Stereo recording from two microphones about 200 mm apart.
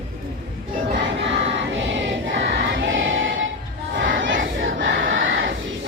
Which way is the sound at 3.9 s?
70° right (ahead or behind).